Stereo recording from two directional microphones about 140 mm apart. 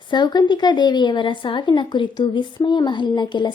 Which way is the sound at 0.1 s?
30° left (ahead or behind).